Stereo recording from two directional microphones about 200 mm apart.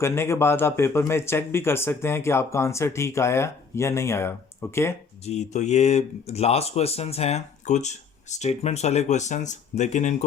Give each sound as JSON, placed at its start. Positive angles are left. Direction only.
{"t": 0.0, "sound": "speech", "side_deg": 15}
{"t": 5.2, "sound": "speech", "side_deg": 35}